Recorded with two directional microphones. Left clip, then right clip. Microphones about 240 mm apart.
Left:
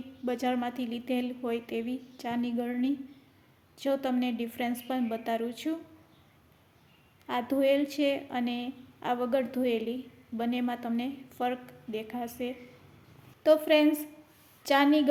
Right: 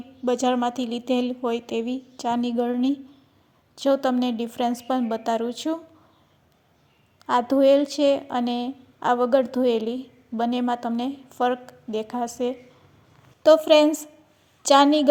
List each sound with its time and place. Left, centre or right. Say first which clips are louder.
0.3 s a woman's voice: right 9 dB; right
7.3 s a woman's voice: right 9 dB; right
13.4 s a woman's voice: right 8 dB; right